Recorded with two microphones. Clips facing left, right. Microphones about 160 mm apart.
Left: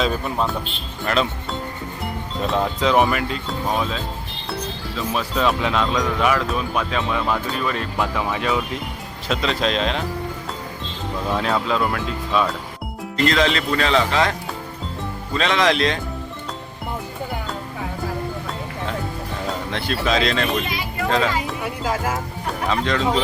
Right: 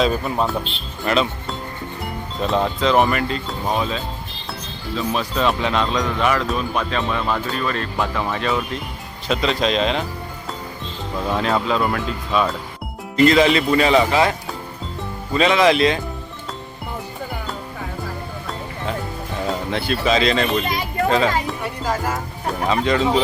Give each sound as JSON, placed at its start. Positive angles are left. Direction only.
{"t": 0.0, "sound": "speech", "side_deg": 0}
{"t": 11.3, "sound": "speech", "side_deg": 0}
{"t": 19.7, "sound": "speech", "side_deg": 0}
{"t": 20.7, "sound": "a sound", "side_deg": -45}
{"t": 21.4, "sound": "music", "side_deg": 0}
{"t": 22.7, "sound": "speech", "side_deg": -5}